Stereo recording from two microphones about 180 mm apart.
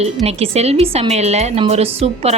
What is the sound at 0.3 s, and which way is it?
A woman's voice, 35° right (ahead or behind).